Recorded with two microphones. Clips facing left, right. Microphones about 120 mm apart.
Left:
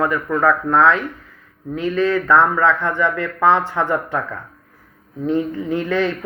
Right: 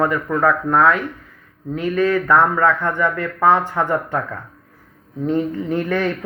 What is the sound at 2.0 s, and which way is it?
Speech, 15° right (ahead or behind).